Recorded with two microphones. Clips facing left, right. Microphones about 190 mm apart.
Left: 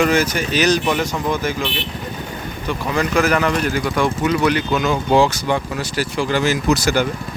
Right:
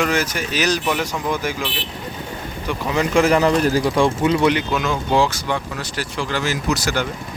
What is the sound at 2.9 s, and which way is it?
Speech, 25° right (ahead or behind).